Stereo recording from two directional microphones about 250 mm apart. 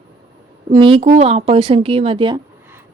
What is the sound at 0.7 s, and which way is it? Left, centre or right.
A woman's voice, right.